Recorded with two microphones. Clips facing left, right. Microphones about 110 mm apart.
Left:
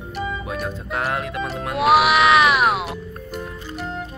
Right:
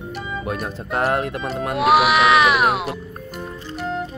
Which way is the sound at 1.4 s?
Centre (ahead or behind).